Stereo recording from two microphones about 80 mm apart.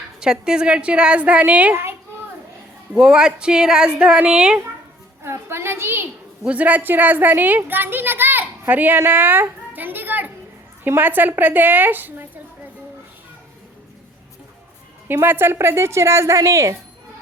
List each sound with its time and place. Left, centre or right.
0.2 s a woman's voice: centre
1.7 s a child's voice: right
2.9 s a woman's voice: centre
5.2 s a sound: right
6.4 s a child's voice: centre
15.0 s a woman's voice: right